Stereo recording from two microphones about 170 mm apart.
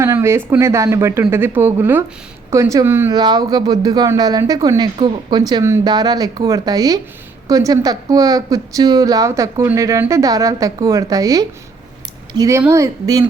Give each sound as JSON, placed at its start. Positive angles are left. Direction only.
{"t": 0.0, "sound": "speech", "side_deg": -15}
{"t": 3.2, "sound": "a woman's voice", "side_deg": -25}